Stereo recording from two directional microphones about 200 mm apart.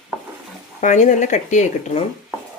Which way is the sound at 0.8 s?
40° left (ahead or behind).